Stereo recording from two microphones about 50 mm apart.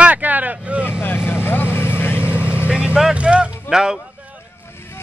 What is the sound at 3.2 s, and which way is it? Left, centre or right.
Music, right.